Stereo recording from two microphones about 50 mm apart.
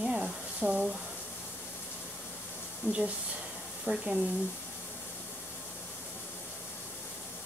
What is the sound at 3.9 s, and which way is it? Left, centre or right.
Speech, right.